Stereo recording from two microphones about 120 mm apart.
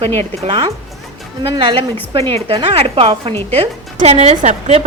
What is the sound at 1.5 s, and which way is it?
A woman's voice, 45° right (ahead or behind).